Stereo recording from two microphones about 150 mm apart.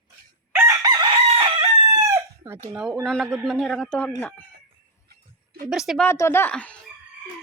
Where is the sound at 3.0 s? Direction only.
5° left (ahead or behind).